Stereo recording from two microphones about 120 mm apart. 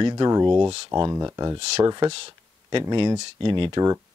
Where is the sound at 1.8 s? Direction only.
35° right (ahead or behind).